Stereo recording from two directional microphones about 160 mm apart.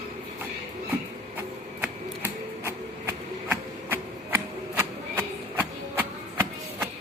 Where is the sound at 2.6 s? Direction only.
15° right (ahead or behind).